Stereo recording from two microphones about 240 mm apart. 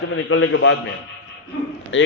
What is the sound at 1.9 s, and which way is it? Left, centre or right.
Speech, left.